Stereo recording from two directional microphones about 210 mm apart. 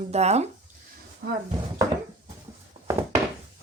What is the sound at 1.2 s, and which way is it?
Speech, 45° right (ahead or behind).